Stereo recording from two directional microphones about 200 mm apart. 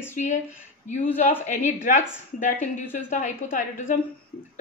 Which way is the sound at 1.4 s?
35° left (ahead or behind).